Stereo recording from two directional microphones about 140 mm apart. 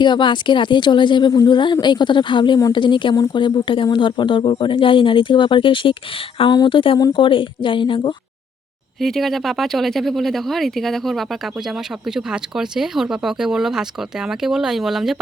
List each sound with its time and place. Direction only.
0.0 s speech: 35° left (ahead or behind)
9.0 s speech: centre (ahead or behind)